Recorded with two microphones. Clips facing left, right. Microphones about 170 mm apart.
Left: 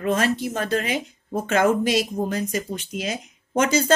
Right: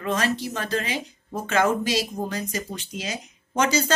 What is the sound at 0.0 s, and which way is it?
A woman's voice, 50° left (ahead or behind).